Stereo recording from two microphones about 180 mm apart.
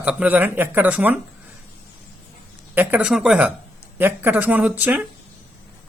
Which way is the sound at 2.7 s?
10° right (ahead or behind).